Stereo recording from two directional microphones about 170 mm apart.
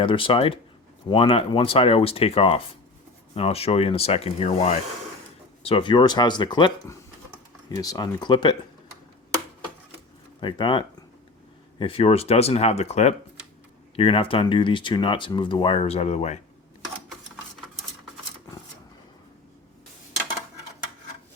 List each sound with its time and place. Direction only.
0.0 s speech: 30° left (ahead or behind)
10.4 s speech: 30° left (ahead or behind)